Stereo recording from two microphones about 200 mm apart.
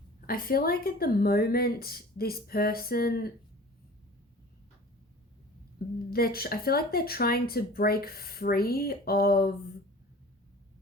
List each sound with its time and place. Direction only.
0.3 s speech: 45° left (ahead or behind)
6.1 s speech: 50° left (ahead or behind)